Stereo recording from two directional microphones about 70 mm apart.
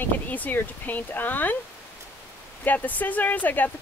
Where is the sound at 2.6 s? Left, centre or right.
Left.